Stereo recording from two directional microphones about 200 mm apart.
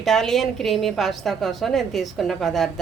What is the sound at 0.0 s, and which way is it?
A woman's voice, centre (ahead or behind).